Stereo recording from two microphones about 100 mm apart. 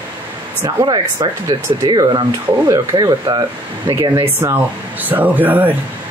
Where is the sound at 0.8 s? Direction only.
50° right (ahead or behind).